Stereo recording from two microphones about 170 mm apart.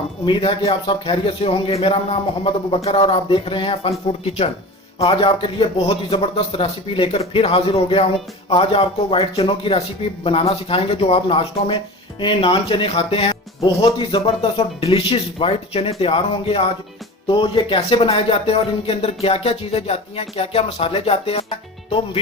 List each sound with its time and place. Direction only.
0.3 s speech: 30° left (ahead or behind)